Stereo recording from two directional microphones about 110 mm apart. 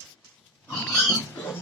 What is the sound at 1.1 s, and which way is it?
Pig, 20° left (ahead or behind).